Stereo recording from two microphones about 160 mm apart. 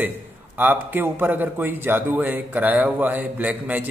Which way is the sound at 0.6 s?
10° right (ahead or behind).